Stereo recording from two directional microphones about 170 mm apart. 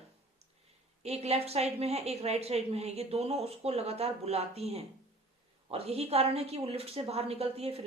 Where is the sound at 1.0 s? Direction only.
40° right (ahead or behind).